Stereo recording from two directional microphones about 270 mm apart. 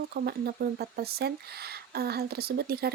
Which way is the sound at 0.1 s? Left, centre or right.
Right.